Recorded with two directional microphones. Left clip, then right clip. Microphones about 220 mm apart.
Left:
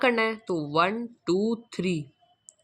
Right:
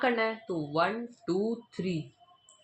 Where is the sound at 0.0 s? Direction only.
35° left (ahead or behind).